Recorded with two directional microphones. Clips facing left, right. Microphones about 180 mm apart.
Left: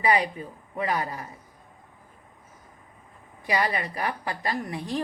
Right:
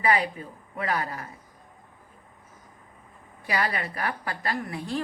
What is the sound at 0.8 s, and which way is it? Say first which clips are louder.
Speech: left 1 dB; 15° left (ahead or behind).